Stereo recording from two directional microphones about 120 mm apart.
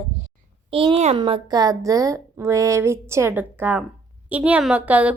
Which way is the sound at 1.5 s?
30° right (ahead or behind).